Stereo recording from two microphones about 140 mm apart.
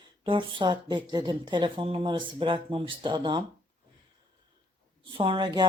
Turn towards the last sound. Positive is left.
turn(degrees=-30)  # may be behind; listen again after turning